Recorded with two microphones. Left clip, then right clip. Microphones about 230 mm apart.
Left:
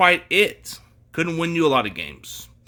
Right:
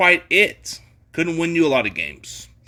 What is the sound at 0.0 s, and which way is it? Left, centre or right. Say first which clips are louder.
Speech: right 2 dB; centre.